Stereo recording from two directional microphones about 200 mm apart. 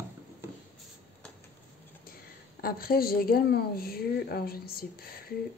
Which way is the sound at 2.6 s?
50° left (ahead or behind).